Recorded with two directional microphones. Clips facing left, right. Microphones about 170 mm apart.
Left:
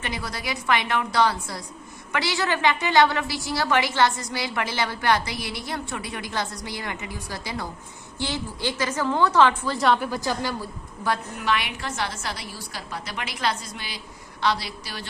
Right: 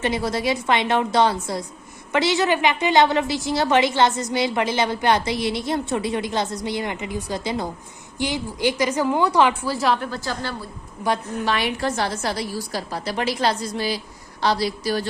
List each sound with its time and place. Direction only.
0.0 s a woman's voice: 25° right (ahead or behind); by 10.1 s centre (ahead or behind)
10.1 s a woman's voice: 15° left (ahead or behind)
11.4 s a woman's voice: 35° right (ahead or behind)